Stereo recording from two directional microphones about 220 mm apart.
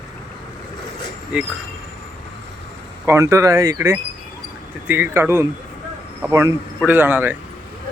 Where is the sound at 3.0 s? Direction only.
10° right (ahead or behind).